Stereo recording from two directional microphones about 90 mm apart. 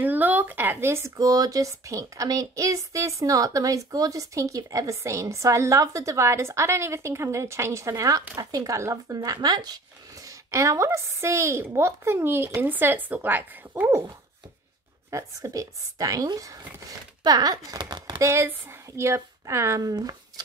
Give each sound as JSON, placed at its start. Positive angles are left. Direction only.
{"t": 0.0, "sound": "a sound", "side_deg": -20}
{"t": 1.1, "sound": "speech", "side_deg": -40}
{"t": 10.2, "sound": "speech", "side_deg": -35}
{"t": 15.0, "sound": "speech", "side_deg": -35}
{"t": 18.2, "sound": "speech", "side_deg": -30}